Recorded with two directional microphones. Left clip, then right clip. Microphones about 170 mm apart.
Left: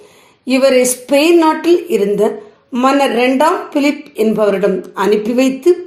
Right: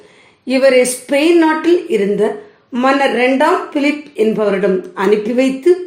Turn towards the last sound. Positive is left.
turn(degrees=30)  # may be behind; listen again after turning